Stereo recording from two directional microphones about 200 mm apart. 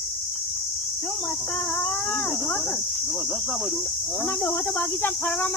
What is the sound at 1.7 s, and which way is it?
Speech, 5° left (ahead or behind).